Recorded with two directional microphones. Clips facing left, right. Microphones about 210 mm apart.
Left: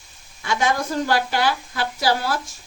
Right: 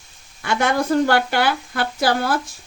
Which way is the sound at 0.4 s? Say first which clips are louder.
Right 3 dB; 60° right (ahead or behind).